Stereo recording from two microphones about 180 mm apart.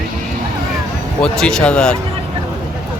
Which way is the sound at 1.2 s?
5° left (ahead or behind).